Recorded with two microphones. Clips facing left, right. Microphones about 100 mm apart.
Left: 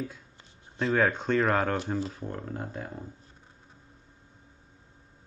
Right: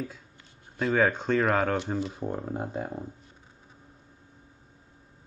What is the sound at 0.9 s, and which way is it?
Speech, centre (ahead or behind).